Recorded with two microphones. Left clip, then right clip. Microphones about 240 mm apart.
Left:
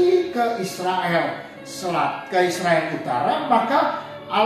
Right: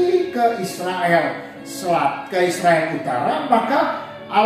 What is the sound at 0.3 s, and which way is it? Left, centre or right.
A woman's voice, centre.